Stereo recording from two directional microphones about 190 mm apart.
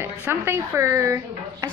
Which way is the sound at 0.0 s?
10° right (ahead or behind).